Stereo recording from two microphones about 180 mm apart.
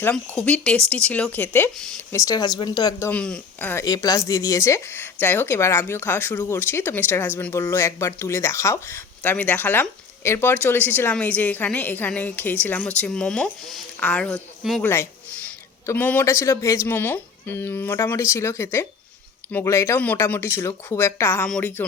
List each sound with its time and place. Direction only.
0.0 s speech: 5° left (ahead or behind)
2.1 s speech: 20° left (ahead or behind)
3.1 s speech: 5° left (ahead or behind)
3.8 s speech: 20° left (ahead or behind)